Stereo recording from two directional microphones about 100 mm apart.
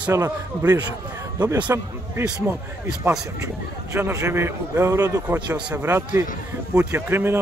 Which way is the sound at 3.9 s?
30° right (ahead or behind).